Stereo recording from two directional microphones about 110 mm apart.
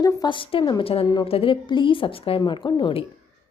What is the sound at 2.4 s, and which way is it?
Speech, 45° left (ahead or behind).